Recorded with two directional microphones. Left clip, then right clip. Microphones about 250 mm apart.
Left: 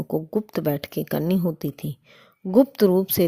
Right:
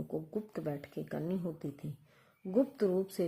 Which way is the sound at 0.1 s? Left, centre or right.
Left.